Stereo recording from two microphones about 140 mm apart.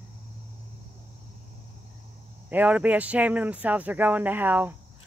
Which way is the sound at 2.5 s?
10° right (ahead or behind).